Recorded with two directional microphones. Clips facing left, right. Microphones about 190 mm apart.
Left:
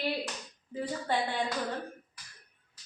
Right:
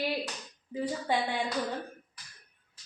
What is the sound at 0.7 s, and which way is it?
Speech, 15° right (ahead or behind).